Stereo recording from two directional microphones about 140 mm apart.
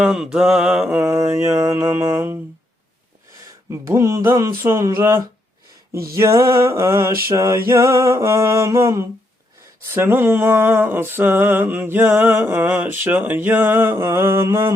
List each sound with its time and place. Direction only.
0.0 s mantra: 5° right (ahead or behind)
1.0 s music: 20° right (ahead or behind)
3.7 s music: 20° right (ahead or behind)
9.8 s mantra: 15° right (ahead or behind)